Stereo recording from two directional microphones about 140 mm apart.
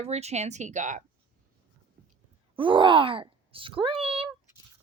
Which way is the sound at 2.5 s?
35° right (ahead or behind).